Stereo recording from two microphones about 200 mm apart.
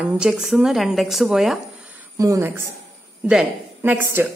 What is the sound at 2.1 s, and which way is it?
A woman's voice, 15° right (ahead or behind).